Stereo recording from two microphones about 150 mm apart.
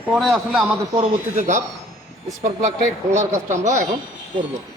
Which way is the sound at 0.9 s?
50° right (ahead or behind).